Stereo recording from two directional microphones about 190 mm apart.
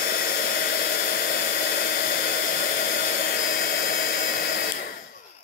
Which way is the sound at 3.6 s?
50° left (ahead or behind).